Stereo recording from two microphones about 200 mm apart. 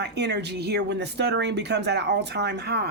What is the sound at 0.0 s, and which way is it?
Speech, 60° right (ahead or behind).